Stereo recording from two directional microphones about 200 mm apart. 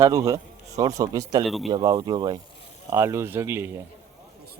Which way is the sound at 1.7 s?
20° right (ahead or behind).